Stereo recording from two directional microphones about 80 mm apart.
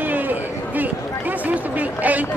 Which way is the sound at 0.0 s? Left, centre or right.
Right.